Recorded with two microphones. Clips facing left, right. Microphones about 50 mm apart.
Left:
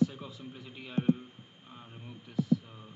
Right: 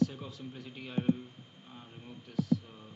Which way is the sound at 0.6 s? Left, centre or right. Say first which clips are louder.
Left 2 dB; centre.